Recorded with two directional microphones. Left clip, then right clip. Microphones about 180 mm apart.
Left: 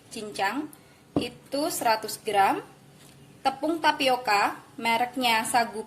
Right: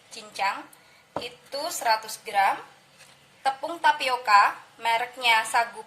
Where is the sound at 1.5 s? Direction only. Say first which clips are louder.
Even; 55° left (ahead or behind).